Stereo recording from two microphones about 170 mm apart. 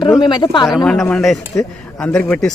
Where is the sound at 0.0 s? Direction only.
25° left (ahead or behind).